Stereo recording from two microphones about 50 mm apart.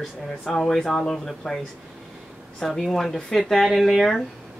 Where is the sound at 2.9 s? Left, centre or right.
Centre.